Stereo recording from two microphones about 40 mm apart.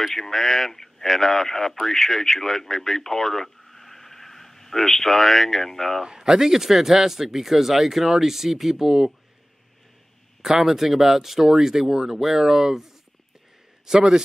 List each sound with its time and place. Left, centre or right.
0.0 s speech: centre
6.0 s speech: centre
10.4 s speech: centre
13.8 s speech: centre